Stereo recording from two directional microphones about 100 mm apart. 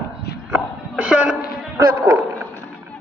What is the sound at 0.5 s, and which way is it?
Hiccup, 10° right (ahead or behind).